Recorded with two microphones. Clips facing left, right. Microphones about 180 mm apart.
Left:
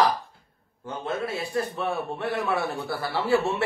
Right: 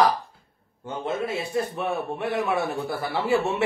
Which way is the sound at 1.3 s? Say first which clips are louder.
Right 2 dB; 20° right (ahead or behind).